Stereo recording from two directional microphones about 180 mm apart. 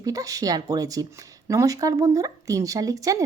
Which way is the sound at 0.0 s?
20° right (ahead or behind).